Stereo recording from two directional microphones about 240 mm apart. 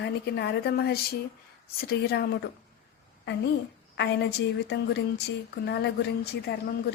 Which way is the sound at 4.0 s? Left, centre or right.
Left.